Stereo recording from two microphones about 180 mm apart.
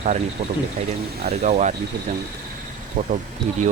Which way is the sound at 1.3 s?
40° right (ahead or behind).